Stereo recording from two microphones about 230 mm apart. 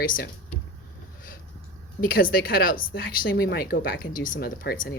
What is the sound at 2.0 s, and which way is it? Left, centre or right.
A woman's voice, left.